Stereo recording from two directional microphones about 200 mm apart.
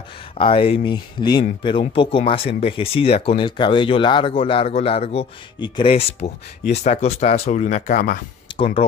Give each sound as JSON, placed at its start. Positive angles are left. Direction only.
{"t": 0.4, "sound": "speech", "side_deg": 25}
{"t": 8.5, "sound": "speech", "side_deg": 25}